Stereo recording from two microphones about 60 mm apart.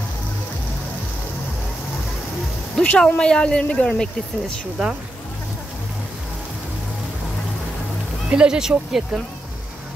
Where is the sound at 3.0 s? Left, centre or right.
Centre.